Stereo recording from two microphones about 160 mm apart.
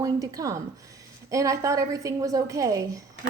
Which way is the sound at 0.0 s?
20° right (ahead or behind).